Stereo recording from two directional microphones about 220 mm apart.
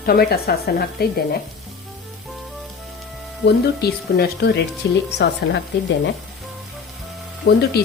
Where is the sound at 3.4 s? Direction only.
45° left (ahead or behind).